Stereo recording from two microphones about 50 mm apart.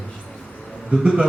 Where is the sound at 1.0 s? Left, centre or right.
Right.